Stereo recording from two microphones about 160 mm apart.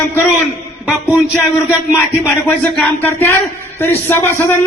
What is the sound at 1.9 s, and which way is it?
A man's voice, 15° left (ahead or behind).